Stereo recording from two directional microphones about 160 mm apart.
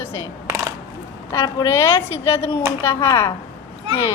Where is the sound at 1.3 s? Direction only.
20° left (ahead or behind).